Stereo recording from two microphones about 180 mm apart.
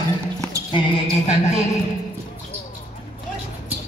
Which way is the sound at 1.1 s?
35° left (ahead or behind).